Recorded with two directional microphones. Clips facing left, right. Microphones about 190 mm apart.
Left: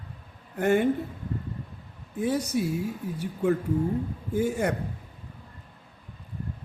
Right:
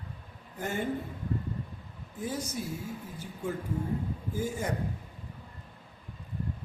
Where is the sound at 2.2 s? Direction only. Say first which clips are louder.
Left 9 dB; 70° left (ahead or behind).